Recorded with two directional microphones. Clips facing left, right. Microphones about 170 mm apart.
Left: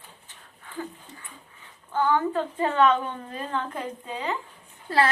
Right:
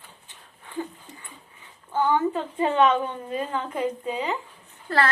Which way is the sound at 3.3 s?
10° right (ahead or behind).